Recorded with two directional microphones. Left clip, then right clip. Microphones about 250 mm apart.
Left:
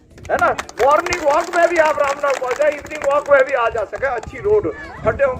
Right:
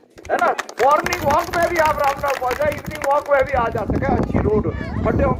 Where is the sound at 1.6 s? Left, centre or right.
Left.